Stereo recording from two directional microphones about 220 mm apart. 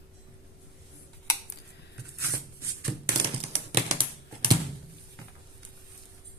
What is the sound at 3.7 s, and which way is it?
Typing, 30° right (ahead or behind).